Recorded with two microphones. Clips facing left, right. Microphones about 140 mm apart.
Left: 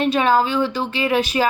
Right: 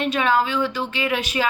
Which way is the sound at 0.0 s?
35° left (ahead or behind).